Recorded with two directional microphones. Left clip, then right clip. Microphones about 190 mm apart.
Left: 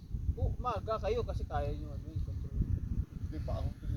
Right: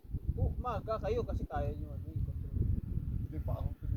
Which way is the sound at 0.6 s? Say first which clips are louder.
Left 2 dB; centre (ahead or behind).